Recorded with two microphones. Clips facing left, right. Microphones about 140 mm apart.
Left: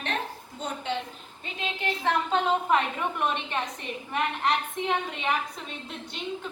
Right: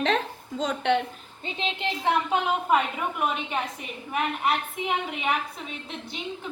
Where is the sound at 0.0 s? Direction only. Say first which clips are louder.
Right 7 dB; 90° right; by 1.0 s 70° right (ahead or behind).